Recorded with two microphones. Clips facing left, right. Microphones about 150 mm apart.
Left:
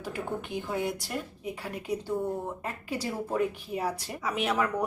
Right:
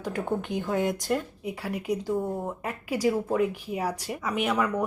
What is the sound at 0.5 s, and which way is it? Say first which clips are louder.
A woman's voice: right 4 dB; 20° right (ahead or behind).